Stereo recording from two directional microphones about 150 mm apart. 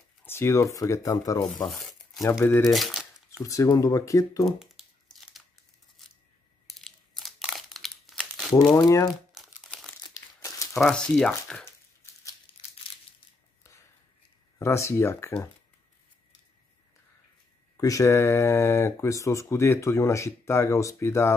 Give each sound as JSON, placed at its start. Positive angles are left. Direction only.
{"t": 0.2, "sound": "speech", "side_deg": 15}
{"t": 1.7, "sound": "a sound", "side_deg": 0}
{"t": 2.4, "sound": "speech", "side_deg": 15}
{"t": 2.7, "sound": "speech", "side_deg": 0}
{"t": 3.4, "sound": "speech", "side_deg": 20}
{"t": 4.5, "sound": "a sound", "side_deg": 0}
{"t": 6.7, "sound": "crumpling", "side_deg": 0}
{"t": 8.7, "sound": "speech", "side_deg": 25}
{"t": 9.3, "sound": "crumpling", "side_deg": 0}
{"t": 10.0, "sound": "crumpling", "side_deg": 25}
{"t": 10.8, "sound": "speech", "side_deg": 0}
{"t": 14.6, "sound": "speech", "side_deg": 20}
{"t": 17.7, "sound": "speech", "side_deg": 20}